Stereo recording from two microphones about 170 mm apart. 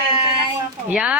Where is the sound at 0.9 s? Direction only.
5° right (ahead or behind).